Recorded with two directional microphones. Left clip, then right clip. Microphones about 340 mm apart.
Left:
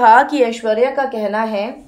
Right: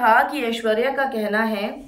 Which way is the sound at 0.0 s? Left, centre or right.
Centre.